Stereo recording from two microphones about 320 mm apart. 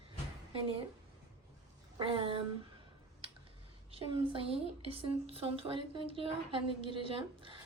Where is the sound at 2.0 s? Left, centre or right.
Centre.